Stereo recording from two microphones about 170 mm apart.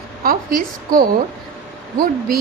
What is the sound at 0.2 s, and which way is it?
Speech, 60° right (ahead or behind).